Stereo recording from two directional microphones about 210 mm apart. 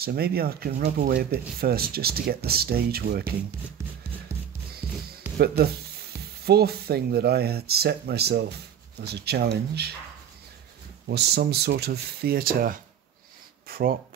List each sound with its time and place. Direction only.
0.0 s speech: 45° right (ahead or behind)
6.4 s speech: 50° right (ahead or behind)
11.1 s speech: 50° right (ahead or behind)
13.7 s a sound: 45° right (ahead or behind)